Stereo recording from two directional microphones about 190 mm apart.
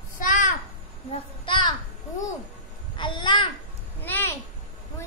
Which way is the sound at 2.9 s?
25° left (ahead or behind).